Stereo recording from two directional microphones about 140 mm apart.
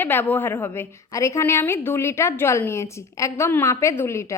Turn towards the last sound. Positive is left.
turn(degrees=20)  # may be behind; listen again after turning